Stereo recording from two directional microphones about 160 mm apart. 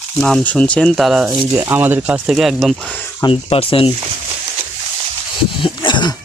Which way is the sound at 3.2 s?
35° left (ahead or behind).